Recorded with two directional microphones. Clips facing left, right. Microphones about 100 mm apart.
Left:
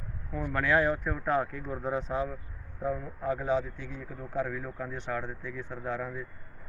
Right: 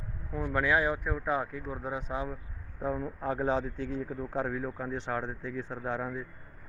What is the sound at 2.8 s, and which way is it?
A man's voice, 25° right (ahead or behind).